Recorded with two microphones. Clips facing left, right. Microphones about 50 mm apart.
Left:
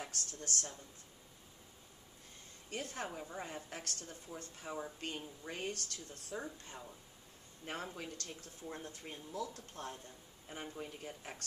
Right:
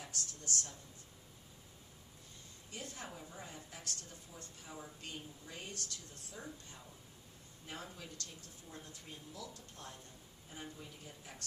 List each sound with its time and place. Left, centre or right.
0.0 s a woman's voice: left
2.7 s a woman's voice: left
3.1 s a woman's voice: left
7.6 s speech: left